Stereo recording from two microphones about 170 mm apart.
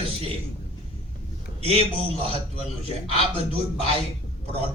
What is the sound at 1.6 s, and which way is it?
Speech, 35° right (ahead or behind).